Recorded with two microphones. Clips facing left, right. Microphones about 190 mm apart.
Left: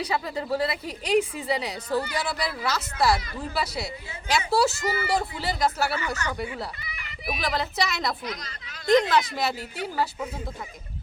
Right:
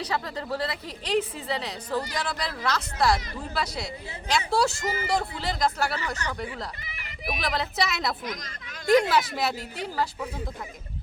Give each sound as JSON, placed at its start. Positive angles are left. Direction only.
{"t": 0.0, "sound": "a woman's voice", "side_deg": 10}
{"t": 8.2, "sound": "speech", "side_deg": -50}
{"t": 8.9, "sound": "a woman's voice", "side_deg": -10}